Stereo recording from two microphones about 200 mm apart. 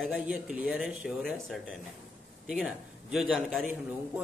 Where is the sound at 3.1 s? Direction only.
Centre (ahead or behind).